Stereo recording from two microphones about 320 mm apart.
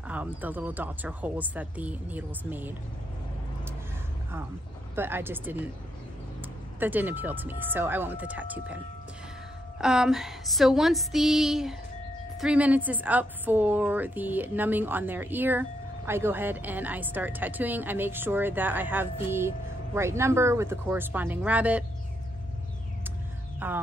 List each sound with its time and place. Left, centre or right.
0.1 s speech: centre
4.9 s speech: centre
6.8 s speech: centre
9.8 s speech: centre
23.6 s music: centre